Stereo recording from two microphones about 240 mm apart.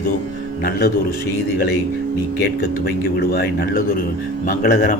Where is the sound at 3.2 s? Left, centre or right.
Left.